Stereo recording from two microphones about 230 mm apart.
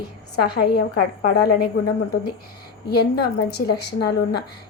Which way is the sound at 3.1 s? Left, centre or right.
Left.